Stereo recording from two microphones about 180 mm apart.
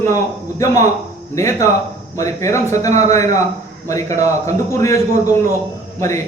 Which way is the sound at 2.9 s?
40° right (ahead or behind).